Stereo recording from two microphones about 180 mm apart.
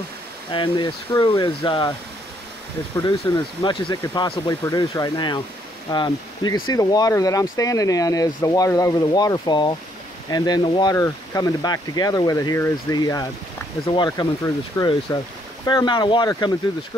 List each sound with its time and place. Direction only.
0.5 s speech: 25° left (ahead or behind)
3.0 s speech: 20° left (ahead or behind)